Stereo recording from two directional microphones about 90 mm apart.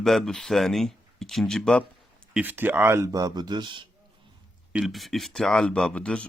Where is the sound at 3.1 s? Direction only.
40° right (ahead or behind); by 3.8 s 60° right (ahead or behind).